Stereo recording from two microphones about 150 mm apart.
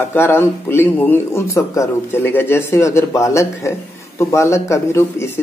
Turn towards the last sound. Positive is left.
turn(degrees=15)  # may be behind; listen again after turning